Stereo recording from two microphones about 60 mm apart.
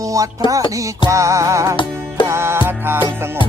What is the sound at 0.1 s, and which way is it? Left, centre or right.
Speech, right.